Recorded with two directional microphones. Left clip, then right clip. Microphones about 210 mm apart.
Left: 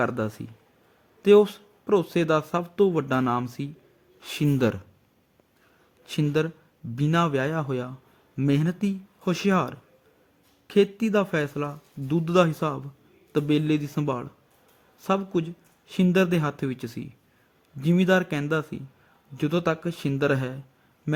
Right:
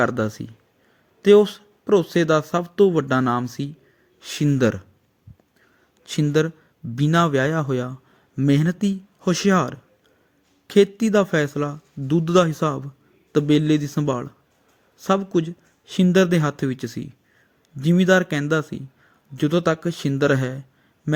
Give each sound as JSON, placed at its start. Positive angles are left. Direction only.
{"t": 0.0, "sound": "speech", "side_deg": -15}
{"t": 6.0, "sound": "speech", "side_deg": -15}